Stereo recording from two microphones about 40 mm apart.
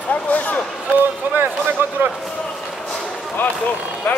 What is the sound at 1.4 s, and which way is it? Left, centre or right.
Speech, right.